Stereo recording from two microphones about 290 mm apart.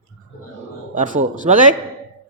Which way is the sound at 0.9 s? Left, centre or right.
Right.